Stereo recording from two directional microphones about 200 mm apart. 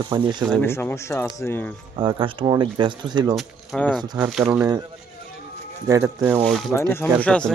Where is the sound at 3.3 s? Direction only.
Centre (ahead or behind).